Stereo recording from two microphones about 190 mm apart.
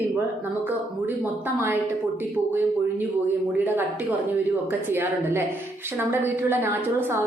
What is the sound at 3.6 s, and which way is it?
A woman's voice, 10° right (ahead or behind).